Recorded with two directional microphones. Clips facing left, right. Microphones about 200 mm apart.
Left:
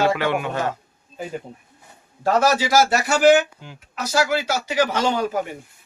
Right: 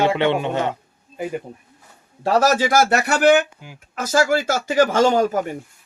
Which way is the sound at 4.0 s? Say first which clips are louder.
Right 3 dB; 50° right (ahead or behind).